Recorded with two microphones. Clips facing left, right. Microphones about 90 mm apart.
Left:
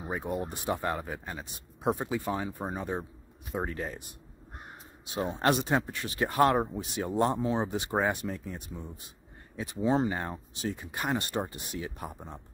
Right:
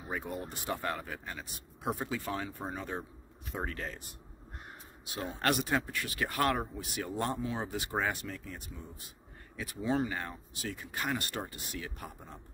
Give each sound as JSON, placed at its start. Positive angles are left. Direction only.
{"t": 0.0, "sound": "speech", "side_deg": 20}
{"t": 5.0, "sound": "speech", "side_deg": 25}